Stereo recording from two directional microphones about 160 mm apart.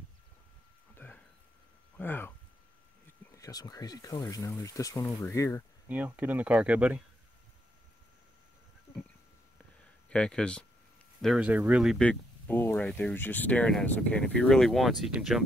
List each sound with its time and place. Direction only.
0.9 s a sound: 10° left (ahead or behind)
2.0 s speech: 15° left (ahead or behind)
3.3 s speech: 20° left (ahead or behind)
5.9 s speech: 10° right (ahead or behind)
10.0 s speech: 5° left (ahead or behind)
12.0 s speech: 10° left (ahead or behind)